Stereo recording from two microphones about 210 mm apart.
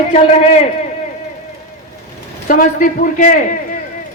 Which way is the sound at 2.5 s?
40° left (ahead or behind).